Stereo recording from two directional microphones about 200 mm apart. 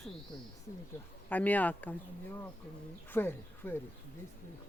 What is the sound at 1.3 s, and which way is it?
Speech, 10° left (ahead or behind).